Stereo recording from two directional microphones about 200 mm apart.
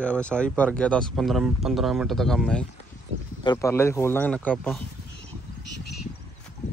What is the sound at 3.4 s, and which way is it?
Speech, 20° left (ahead or behind).